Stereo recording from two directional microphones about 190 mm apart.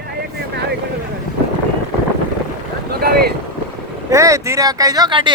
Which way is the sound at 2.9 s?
55° right (ahead or behind).